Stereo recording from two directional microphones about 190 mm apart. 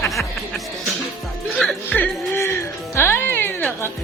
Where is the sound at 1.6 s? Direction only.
5° left (ahead or behind).